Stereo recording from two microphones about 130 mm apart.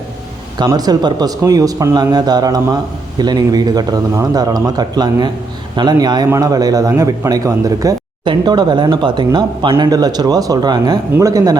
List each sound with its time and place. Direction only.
0.6 s speech: 30° right (ahead or behind)